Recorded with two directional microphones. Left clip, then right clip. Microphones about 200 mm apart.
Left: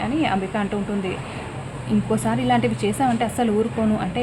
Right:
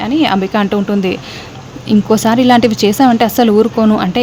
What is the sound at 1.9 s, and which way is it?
Speech, 50° right (ahead or behind).